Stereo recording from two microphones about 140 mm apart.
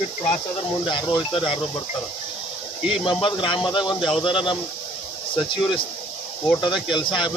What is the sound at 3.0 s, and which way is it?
Speech, 35° left (ahead or behind).